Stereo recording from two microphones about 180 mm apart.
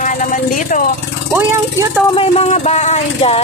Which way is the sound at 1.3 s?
10° right (ahead or behind).